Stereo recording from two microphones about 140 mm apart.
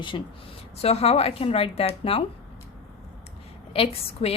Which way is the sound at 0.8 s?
45° left (ahead or behind).